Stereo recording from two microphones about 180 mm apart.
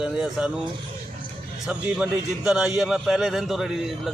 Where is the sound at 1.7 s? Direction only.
5° right (ahead or behind).